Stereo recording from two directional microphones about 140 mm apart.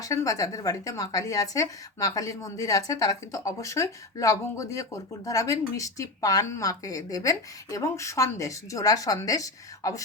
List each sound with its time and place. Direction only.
0.0 s speech: 25° left (ahead or behind)